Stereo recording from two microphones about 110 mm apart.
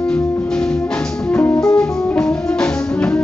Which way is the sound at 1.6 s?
10° left (ahead or behind).